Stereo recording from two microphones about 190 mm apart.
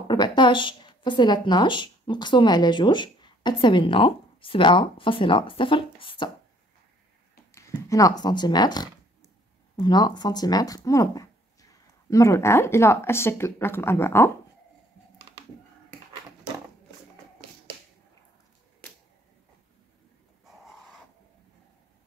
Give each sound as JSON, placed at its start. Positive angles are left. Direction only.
{"t": 0.1, "sound": "a woman's voice", "side_deg": 25}
{"t": 7.5, "sound": "a sound", "side_deg": 15}
{"t": 8.2, "sound": "a woman's voice", "side_deg": 20}